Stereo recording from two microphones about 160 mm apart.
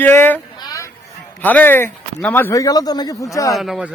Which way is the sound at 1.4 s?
10° left (ahead or behind).